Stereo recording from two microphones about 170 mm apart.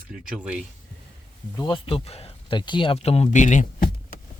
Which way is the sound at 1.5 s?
25° left (ahead or behind).